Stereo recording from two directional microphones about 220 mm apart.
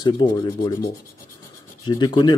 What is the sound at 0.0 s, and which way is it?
A man's voice, 20° left (ahead or behind).